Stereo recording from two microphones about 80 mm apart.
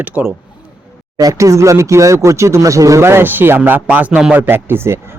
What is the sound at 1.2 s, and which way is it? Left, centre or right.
A man's voice, right.